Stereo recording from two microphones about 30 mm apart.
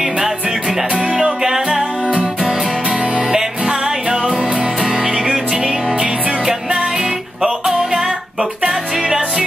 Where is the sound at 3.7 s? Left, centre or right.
Right.